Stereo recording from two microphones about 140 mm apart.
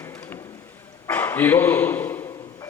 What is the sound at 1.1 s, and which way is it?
Dog, 15° left (ahead or behind).